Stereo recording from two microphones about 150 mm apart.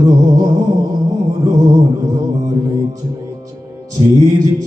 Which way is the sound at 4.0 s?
30° right (ahead or behind).